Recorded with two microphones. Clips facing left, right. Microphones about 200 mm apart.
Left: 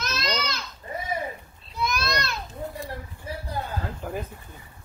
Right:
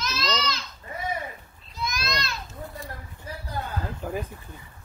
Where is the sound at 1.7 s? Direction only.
60° left (ahead or behind).